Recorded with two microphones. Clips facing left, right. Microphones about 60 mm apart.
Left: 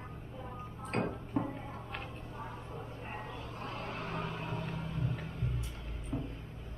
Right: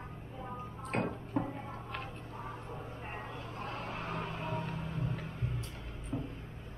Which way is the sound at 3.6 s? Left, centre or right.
Right.